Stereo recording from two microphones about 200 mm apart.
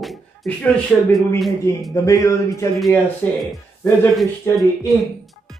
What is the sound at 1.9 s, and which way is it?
Speech, 15° left (ahead or behind).